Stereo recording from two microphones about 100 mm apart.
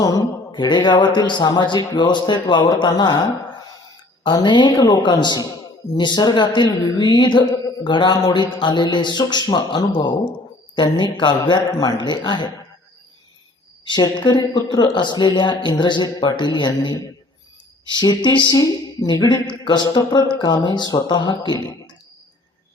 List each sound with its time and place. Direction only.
0.0 s speech: 40° left (ahead or behind)
4.4 s speech: 50° left (ahead or behind)
13.8 s speech: 50° left (ahead or behind)